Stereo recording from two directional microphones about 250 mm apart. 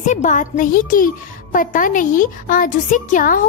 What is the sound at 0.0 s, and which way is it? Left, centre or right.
A child's voice, left.